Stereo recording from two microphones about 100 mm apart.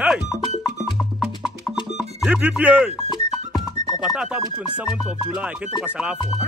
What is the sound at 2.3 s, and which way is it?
Speech, 15° right (ahead or behind).